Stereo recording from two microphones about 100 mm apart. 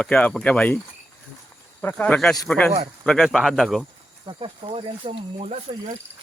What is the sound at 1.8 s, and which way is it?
Speech, 20° left (ahead or behind).